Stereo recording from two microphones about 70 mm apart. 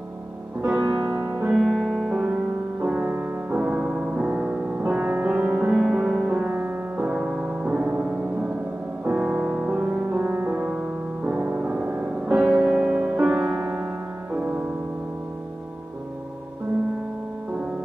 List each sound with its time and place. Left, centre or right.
0.7 s music: right
1.1 s music: right
1.5 s music: centre
2.8 s music: right
10.6 s music: centre
12.5 s music: centre